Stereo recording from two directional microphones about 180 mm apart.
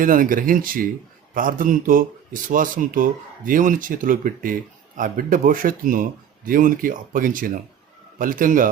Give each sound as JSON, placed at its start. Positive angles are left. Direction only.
{"t": 0.0, "sound": "speech", "side_deg": -50}